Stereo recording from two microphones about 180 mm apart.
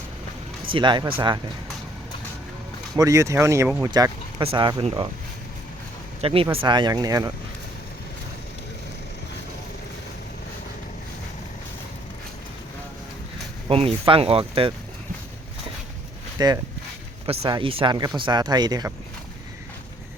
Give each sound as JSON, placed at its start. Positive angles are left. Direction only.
{"t": 0.7, "sound": "speech", "side_deg": -25}
{"t": 2.9, "sound": "speech", "side_deg": -20}
{"t": 6.2, "sound": "speech", "side_deg": -30}
{"t": 13.7, "sound": "speech", "side_deg": -30}
{"t": 16.4, "sound": "speech", "side_deg": -20}